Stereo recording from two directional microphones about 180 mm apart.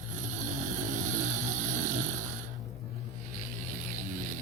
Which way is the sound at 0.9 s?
45° right (ahead or behind).